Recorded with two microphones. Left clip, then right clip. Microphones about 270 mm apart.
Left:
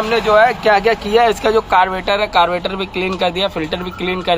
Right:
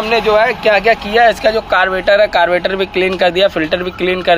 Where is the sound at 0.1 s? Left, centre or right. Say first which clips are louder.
Even; centre.